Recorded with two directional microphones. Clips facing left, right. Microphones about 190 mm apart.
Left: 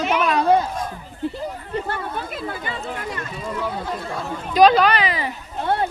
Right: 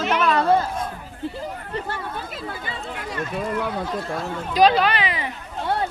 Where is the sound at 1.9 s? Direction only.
55° left (ahead or behind).